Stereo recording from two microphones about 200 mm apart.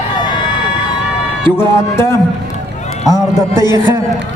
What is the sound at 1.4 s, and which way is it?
Speech, 10° left (ahead or behind).